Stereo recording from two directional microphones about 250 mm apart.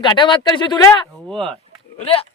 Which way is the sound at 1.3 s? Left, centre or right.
Centre.